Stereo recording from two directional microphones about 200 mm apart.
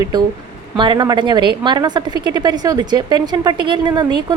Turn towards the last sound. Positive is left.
turn(degrees=-20)  # may be behind; listen again after turning